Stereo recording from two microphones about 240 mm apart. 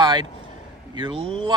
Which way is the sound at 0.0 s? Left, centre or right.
Centre.